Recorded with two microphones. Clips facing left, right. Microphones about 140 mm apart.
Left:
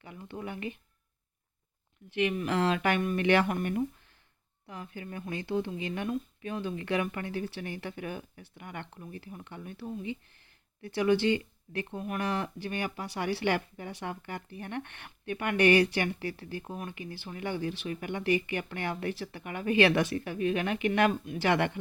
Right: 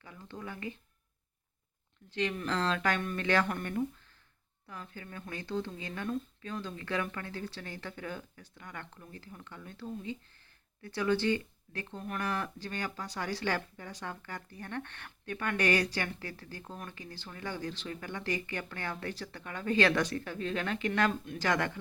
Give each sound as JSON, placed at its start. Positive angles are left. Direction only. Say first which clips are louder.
{"t": 0.0, "sound": "speech", "louder": "left 4 dB", "side_deg": 20}
{"t": 2.1, "sound": "speech", "louder": "left 4 dB", "side_deg": 10}